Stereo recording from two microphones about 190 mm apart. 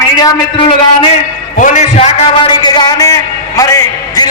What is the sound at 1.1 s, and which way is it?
A man's voice, 40° left (ahead or behind).